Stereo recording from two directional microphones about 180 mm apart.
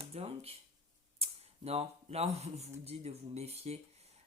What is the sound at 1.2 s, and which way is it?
Speech, 35° right (ahead or behind).